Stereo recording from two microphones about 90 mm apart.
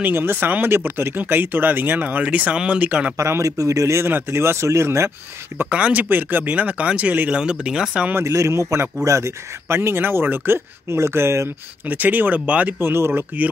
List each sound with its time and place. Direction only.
0.0 s speech: 25° right (ahead or behind)
3.2 s speech: 30° right (ahead or behind)
5.7 s speech: 15° right (ahead or behind)
8.1 s speech: 30° right (ahead or behind)